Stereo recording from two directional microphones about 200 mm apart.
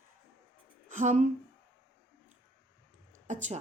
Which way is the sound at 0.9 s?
40° right (ahead or behind).